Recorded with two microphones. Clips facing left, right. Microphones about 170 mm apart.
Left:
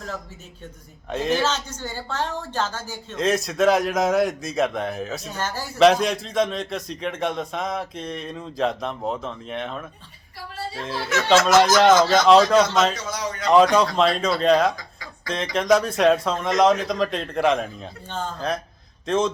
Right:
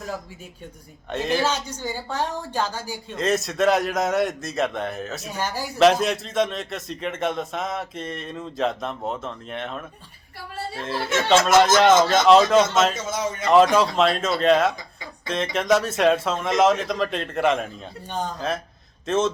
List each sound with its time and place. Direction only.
1.1 s a man's voice: centre (ahead or behind)
1.4 s a woman's voice: 10° right (ahead or behind)
3.2 s a man's voice: centre (ahead or behind)
5.3 s a woman's voice: 15° right (ahead or behind)
5.8 s a man's voice: centre (ahead or behind)
13.1 s speech: 25° right (ahead or behind)
13.5 s a man's voice: centre (ahead or behind)
18.1 s a woman's voice: 15° right (ahead or behind)
19.0 s a man's voice: centre (ahead or behind)